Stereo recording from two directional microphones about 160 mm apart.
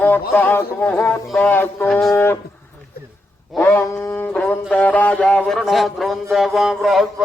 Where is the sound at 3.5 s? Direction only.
15° left (ahead or behind).